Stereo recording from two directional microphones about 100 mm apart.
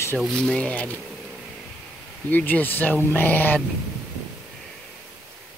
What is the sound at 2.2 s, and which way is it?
Speech, 15° left (ahead or behind).